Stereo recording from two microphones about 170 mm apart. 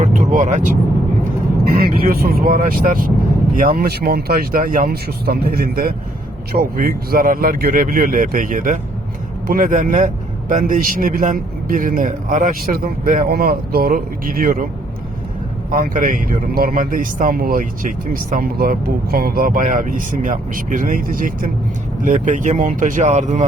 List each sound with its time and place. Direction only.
0.0 s vehicle: 50° right (ahead or behind)
1.7 s a man's voice: 60° right (ahead or behind)
15.7 s speech: 55° right (ahead or behind)